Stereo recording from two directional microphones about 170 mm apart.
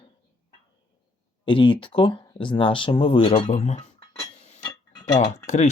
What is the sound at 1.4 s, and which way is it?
Speech, 30° left (ahead or behind).